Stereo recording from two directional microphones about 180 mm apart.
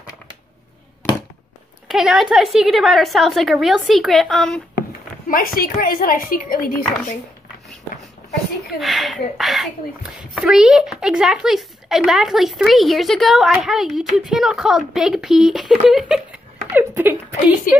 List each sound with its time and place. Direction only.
1.9 s a woman's voice: centre (ahead or behind)
5.3 s a woman's voice: 55° left (ahead or behind)
8.7 s a woman's voice: centre (ahead or behind)